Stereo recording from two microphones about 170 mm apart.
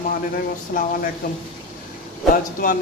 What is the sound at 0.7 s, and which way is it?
Speech, 50° left (ahead or behind).